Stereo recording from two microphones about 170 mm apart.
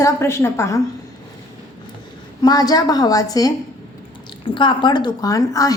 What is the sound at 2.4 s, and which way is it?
A woman's voice, 20° left (ahead or behind).